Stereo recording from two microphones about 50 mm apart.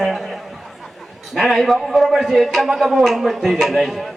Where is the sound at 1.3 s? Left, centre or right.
Centre.